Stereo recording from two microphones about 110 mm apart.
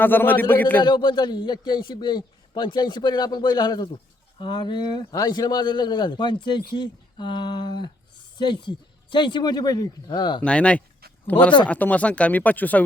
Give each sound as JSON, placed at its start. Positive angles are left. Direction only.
{"t": 0.0, "sound": "speech", "side_deg": 15}
{"t": 0.9, "sound": "a man's voice", "side_deg": 40}
{"t": 10.4, "sound": "speech", "side_deg": 10}